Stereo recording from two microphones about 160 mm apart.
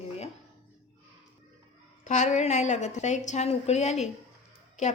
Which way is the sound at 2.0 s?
50° left (ahead or behind).